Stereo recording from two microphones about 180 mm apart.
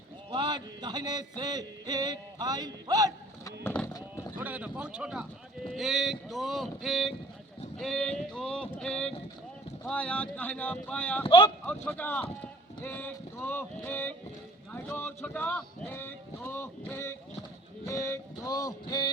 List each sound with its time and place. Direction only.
0.3 s speech: 25° right (ahead or behind)
3.4 s a sound: 10° left (ahead or behind)
4.4 s speech: 10° right (ahead or behind); by 11.2 s 10° left (ahead or behind)
11.2 s music: 30° left (ahead or behind)
11.6 s speech: 10° left (ahead or behind)
17.8 s music: 15° left (ahead or behind)